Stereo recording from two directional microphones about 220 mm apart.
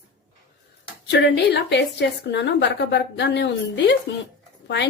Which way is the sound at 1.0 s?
50° left (ahead or behind).